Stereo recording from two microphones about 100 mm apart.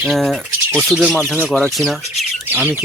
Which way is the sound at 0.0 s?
Centre (ahead or behind).